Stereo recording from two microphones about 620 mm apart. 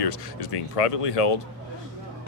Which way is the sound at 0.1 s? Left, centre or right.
Left.